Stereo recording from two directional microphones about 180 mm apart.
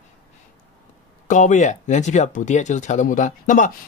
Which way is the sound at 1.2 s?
45° left (ahead or behind).